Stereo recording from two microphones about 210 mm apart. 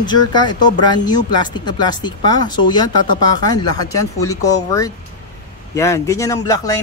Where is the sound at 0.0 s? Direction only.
20° left (ahead or behind).